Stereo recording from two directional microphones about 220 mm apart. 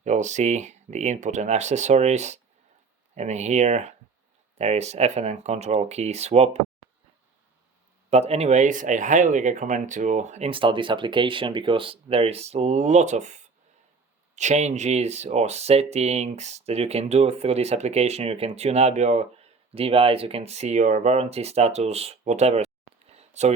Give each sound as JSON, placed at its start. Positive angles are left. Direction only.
{"t": 0.0, "sound": "speech", "side_deg": -30}
{"t": 8.1, "sound": "speech", "side_deg": -30}